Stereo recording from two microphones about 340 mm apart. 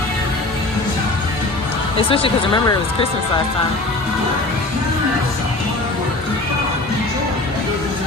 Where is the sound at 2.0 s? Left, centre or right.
Centre.